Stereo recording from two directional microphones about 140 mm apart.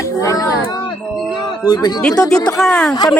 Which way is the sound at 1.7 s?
30° left (ahead or behind).